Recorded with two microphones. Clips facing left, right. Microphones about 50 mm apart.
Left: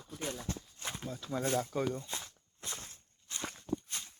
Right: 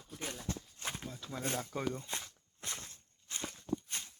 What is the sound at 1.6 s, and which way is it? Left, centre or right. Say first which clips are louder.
Speech: left 3 dB; centre.